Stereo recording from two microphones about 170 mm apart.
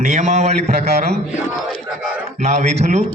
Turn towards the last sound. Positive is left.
turn(degrees=-40)  # may be behind; listen again after turning